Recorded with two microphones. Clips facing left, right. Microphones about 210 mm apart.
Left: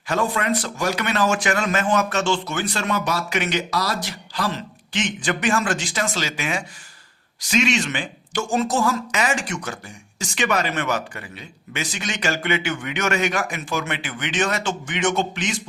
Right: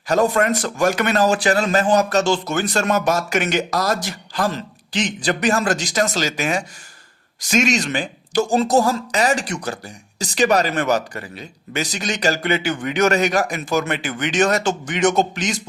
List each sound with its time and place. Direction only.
0.1 s a man's voice: 45° right (ahead or behind)